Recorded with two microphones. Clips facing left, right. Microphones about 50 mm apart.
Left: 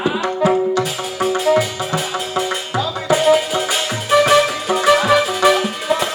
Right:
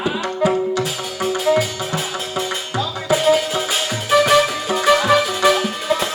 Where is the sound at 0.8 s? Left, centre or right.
Centre.